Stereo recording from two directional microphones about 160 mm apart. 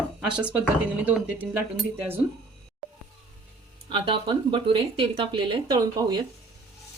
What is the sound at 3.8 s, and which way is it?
Speech, 35° right (ahead or behind).